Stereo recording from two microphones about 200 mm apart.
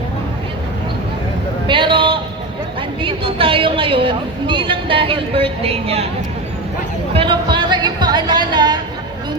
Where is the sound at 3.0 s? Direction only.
25° right (ahead or behind).